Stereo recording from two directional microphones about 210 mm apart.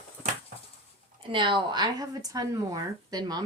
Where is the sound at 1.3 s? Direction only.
25° right (ahead or behind).